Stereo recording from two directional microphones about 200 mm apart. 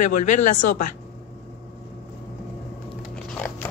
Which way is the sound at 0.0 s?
40° left (ahead or behind).